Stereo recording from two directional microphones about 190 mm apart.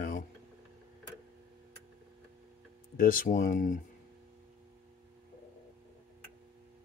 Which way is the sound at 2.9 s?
45° left (ahead or behind).